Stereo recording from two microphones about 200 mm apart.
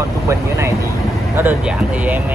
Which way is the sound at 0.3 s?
15° right (ahead or behind).